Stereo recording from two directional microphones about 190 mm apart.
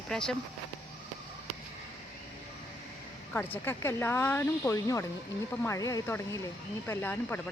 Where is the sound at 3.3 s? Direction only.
10° left (ahead or behind).